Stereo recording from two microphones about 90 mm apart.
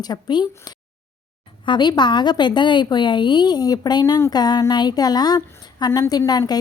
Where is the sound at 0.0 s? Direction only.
50° left (ahead or behind).